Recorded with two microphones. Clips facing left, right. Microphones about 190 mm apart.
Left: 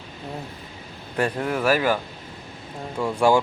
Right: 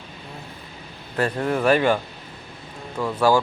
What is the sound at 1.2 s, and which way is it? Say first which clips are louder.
Speech: right 2 dB; 10° left (ahead or behind).